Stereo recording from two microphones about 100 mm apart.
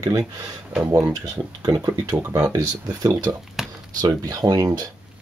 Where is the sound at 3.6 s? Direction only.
5° right (ahead or behind).